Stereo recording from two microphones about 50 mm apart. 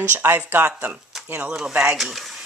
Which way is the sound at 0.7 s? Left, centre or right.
Right.